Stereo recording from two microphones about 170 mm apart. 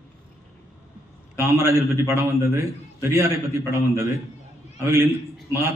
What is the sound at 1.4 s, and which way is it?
A man's voice, 15° right (ahead or behind).